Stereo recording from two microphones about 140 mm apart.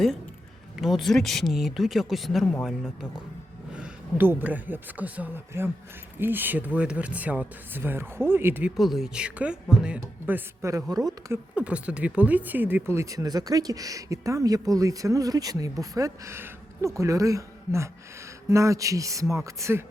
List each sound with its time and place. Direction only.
0.8 s speech: centre (ahead or behind); by 8.7 s 15° right (ahead or behind)
8.7 s speech: centre (ahead or behind); by 11.3 s 30° right (ahead or behind)
11.5 s speech: 10° right (ahead or behind)